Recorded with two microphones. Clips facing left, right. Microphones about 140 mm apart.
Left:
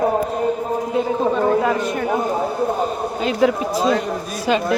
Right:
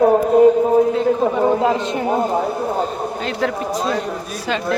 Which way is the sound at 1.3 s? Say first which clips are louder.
Right 1 dB; 20° right (ahead or behind).